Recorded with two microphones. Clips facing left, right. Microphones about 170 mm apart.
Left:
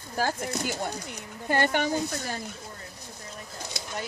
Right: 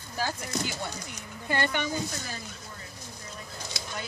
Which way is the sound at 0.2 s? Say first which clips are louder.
Left 3 dB; 50° left (ahead or behind).